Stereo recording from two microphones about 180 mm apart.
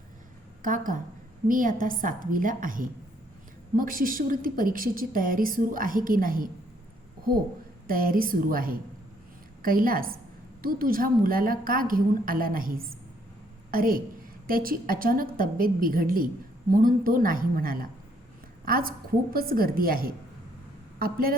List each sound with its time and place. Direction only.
0.6 s a woman's voice: 50° right (ahead or behind)
7.9 s a woman's voice: 55° right (ahead or behind)